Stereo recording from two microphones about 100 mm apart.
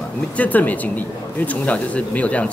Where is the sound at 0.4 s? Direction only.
15° left (ahead or behind).